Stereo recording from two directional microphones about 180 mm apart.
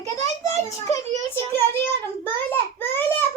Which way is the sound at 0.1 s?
20° left (ahead or behind).